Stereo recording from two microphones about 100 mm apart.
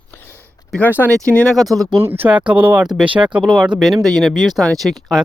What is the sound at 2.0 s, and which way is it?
Speech, 20° right (ahead or behind).